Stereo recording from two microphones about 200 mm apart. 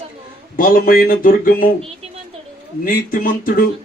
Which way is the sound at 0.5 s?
45° left (ahead or behind).